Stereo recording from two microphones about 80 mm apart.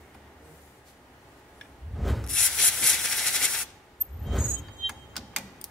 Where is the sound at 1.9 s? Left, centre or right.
Centre.